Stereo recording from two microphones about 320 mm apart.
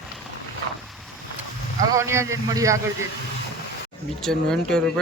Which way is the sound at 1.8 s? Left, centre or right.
Centre.